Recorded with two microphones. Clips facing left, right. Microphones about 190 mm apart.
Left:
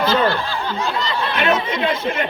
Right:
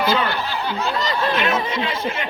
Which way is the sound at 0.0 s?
15° right (ahead or behind).